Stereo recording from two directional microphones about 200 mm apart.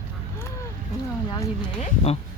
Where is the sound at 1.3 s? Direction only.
20° left (ahead or behind).